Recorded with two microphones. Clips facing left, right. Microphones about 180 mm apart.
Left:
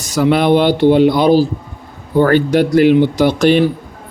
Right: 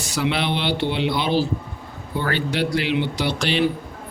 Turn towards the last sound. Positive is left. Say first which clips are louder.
# left 10 dB
turn(degrees=45)  # may be behind; listen again after turning